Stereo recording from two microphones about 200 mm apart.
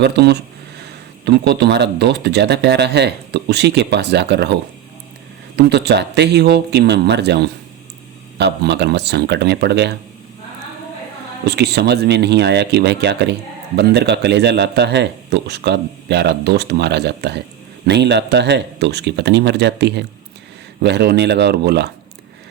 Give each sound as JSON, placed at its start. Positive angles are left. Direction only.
{"t": 0.0, "sound": "speech", "side_deg": -55}
{"t": 5.5, "sound": "speech", "side_deg": -55}
{"t": 11.4, "sound": "speech", "side_deg": -55}